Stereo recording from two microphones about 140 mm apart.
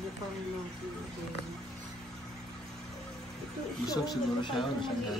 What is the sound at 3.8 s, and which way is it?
A woman's voice, 25° left (ahead or behind).